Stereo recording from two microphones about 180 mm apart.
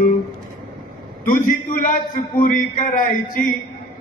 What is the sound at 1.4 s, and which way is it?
A man's voice, 45° left (ahead or behind).